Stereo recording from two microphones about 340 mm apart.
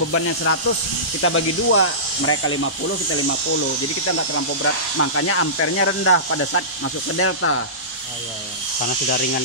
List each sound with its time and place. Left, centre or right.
0.1 s speech: left
8.8 s speech: left